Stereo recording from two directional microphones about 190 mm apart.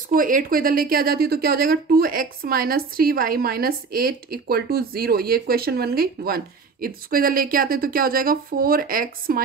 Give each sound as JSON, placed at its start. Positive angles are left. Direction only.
{"t": 0.1, "sound": "a woman's voice", "side_deg": -45}